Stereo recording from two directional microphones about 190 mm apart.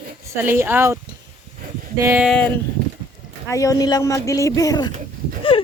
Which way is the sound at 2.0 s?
10° right (ahead or behind).